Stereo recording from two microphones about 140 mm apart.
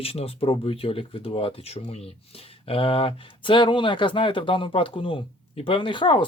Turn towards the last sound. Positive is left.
turn(degrees=35)  # may be behind; listen again after turning